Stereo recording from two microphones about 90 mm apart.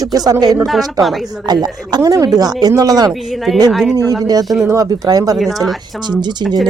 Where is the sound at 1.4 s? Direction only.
50° right (ahead or behind).